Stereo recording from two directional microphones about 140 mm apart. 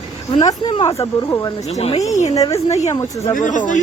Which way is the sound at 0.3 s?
30° left (ahead or behind).